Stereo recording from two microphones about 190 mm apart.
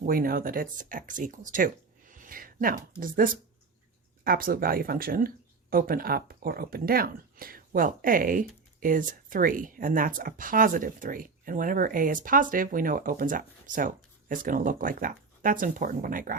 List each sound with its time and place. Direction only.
0.0 s speech: 50° right (ahead or behind)